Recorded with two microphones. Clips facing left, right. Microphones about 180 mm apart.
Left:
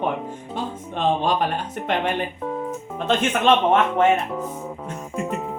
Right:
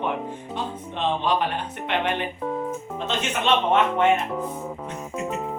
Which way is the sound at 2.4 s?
Centre (ahead or behind).